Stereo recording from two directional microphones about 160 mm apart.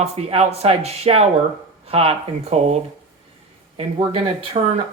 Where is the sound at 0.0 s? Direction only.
40° right (ahead or behind).